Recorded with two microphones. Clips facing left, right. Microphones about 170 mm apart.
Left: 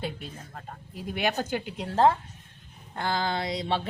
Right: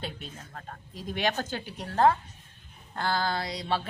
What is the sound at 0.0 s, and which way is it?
Speech, 10° left (ahead or behind).